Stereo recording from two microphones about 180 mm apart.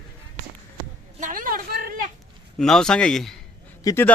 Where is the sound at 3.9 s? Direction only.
15° left (ahead or behind).